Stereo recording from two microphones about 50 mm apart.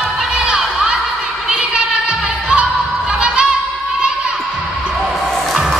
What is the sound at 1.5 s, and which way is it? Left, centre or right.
Music, centre.